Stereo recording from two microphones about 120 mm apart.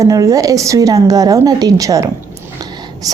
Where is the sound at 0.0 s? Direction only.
25° right (ahead or behind).